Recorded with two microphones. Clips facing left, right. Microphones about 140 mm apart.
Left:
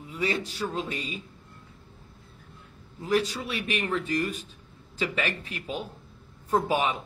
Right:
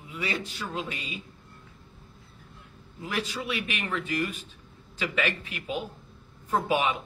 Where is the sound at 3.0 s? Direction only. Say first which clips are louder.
Left 5 dB; 40° left (ahead or behind).